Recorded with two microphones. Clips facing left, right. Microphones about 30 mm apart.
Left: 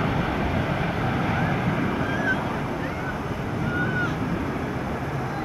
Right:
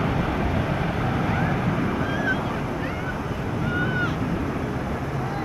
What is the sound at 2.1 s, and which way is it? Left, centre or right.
Boat, centre.